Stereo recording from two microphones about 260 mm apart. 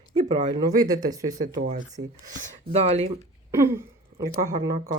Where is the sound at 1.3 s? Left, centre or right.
Right.